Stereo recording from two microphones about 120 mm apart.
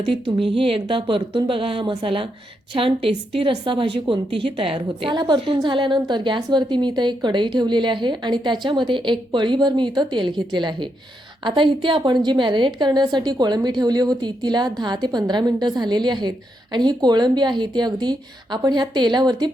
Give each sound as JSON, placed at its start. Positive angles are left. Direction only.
{"t": 0.5, "sound": "a woman's voice", "side_deg": -50}